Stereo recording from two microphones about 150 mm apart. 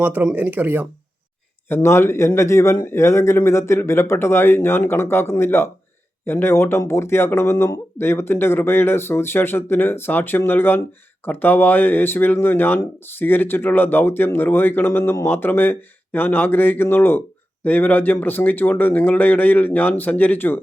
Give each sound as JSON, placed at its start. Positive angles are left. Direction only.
{"t": 0.0, "sound": "speech", "side_deg": -10}
{"t": 1.7, "sound": "speech", "side_deg": 15}